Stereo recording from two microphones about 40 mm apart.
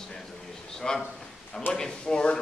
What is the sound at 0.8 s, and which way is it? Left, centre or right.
Speech, left.